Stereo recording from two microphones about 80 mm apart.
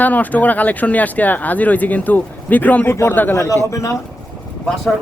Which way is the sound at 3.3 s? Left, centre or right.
Left.